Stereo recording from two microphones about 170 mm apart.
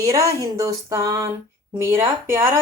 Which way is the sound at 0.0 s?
20° right (ahead or behind).